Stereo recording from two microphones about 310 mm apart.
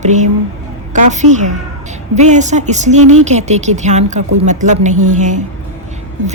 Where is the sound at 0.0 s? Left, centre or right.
Right.